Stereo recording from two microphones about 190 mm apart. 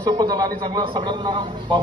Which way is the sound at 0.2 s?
25° right (ahead or behind).